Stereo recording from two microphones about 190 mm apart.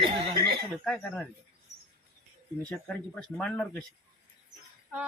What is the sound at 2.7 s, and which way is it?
Speech, 5° left (ahead or behind).